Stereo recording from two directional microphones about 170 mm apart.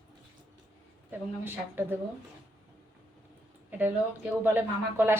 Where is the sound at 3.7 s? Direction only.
10° right (ahead or behind).